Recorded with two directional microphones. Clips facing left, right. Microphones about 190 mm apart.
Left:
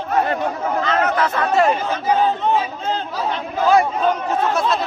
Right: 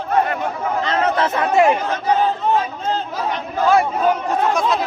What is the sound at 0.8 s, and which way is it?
Speech, 30° right (ahead or behind).